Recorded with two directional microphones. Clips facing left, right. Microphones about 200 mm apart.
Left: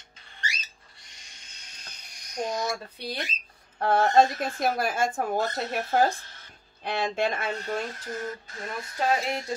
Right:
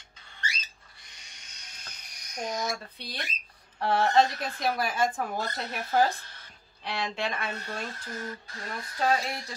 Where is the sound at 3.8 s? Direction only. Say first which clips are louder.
Left 3 dB; 45° left (ahead or behind).